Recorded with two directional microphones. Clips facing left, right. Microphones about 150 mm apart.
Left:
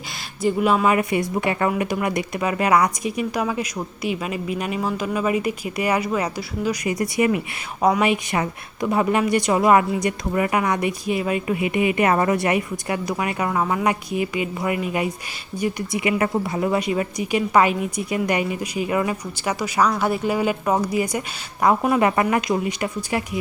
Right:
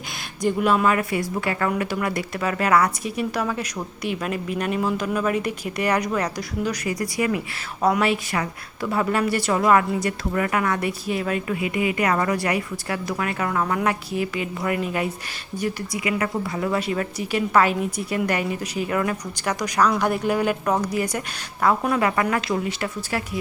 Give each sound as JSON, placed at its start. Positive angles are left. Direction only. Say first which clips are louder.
{"t": 0.6, "sound": "speech", "louder": "left 1 dB", "side_deg": 10}
{"t": 6.8, "sound": "speech", "louder": "left 4 dB", "side_deg": 20}
{"t": 15.9, "sound": "speech", "louder": "left 6 dB", "side_deg": 25}